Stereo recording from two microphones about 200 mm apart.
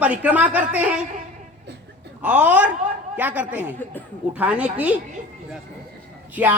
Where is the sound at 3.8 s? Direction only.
10° left (ahead or behind).